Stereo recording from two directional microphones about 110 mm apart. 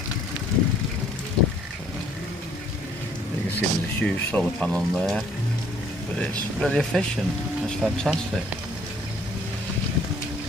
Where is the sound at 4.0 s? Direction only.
10° left (ahead or behind).